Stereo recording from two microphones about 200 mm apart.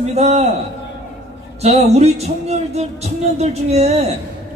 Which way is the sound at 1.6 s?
30° right (ahead or behind).